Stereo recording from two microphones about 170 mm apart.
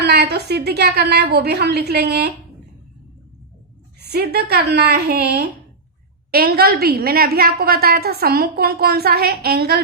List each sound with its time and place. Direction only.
0.0 s a woman's voice: 75° right (ahead or behind)
4.0 s a woman's voice: 70° right (ahead or behind)